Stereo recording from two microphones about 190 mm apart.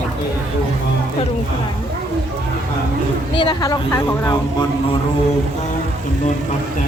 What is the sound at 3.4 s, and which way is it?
A woman's voice, 20° left (ahead or behind).